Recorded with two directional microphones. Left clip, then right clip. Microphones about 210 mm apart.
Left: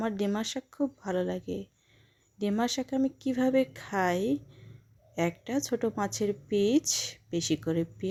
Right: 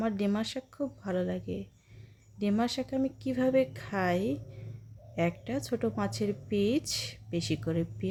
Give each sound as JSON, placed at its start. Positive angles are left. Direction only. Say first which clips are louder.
{"t": 0.0, "sound": "a woman's voice", "louder": "left 1 dB", "side_deg": 15}